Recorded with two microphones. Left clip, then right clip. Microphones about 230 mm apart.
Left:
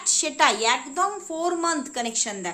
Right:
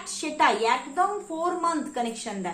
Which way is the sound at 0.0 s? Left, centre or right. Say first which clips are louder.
Left 3 dB; left.